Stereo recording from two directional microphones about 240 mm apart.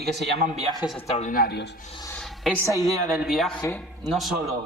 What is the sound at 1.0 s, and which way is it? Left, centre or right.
Speech, left.